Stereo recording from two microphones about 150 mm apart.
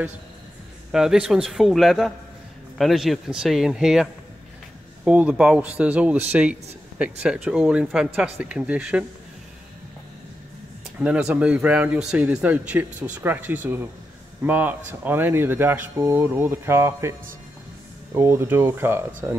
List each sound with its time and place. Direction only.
0.9 s a man's voice: 5° right (ahead or behind)
11.0 s a man's voice: 5° right (ahead or behind)
18.1 s a man's voice: 15° right (ahead or behind)